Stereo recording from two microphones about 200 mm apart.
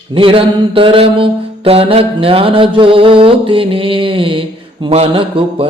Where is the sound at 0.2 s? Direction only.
25° right (ahead or behind).